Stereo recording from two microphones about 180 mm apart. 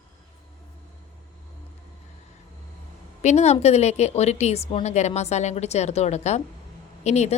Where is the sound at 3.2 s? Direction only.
40° left (ahead or behind).